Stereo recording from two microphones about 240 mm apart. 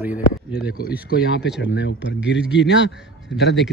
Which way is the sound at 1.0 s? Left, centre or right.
Left.